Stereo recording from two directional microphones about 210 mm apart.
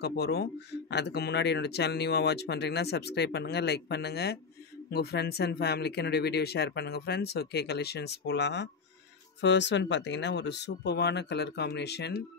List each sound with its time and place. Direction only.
0.0 s speech: 50° left (ahead or behind)